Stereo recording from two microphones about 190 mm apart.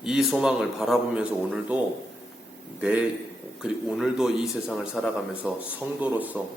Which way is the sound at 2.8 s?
5° right (ahead or behind).